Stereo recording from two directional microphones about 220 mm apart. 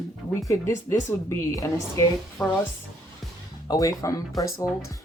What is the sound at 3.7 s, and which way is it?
Speech, 15° left (ahead or behind).